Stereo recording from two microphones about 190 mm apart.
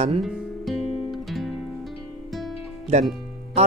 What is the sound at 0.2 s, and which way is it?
Music, centre (ahead or behind).